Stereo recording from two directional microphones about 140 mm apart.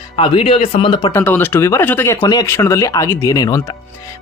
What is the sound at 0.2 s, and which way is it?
Speech, 40° left (ahead or behind).